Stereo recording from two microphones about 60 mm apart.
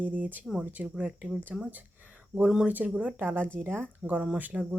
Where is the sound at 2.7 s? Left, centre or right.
Right.